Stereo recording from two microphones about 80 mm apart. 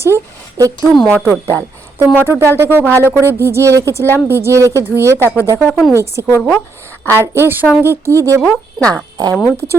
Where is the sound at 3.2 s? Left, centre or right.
Right.